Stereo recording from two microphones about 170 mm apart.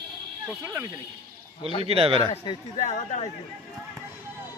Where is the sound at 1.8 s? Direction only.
35° right (ahead or behind).